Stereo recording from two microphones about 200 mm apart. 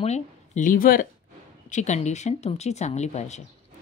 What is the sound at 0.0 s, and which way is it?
Speech, 35° left (ahead or behind).